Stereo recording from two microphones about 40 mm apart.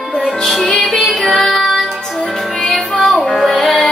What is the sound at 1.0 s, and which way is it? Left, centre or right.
Music, centre.